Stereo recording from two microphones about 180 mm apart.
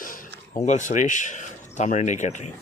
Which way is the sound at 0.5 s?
40° left (ahead or behind).